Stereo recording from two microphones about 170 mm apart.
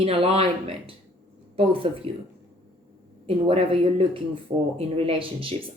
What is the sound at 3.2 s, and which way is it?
Speech, 35° right (ahead or behind).